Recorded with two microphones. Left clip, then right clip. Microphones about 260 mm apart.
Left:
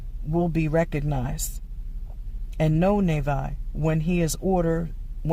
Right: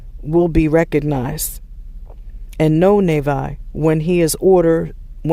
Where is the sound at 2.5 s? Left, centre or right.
Right.